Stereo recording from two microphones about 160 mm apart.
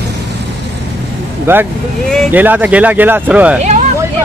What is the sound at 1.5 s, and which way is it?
Speech, 15° right (ahead or behind).